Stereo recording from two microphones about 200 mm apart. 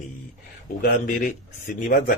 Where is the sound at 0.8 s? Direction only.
40° left (ahead or behind).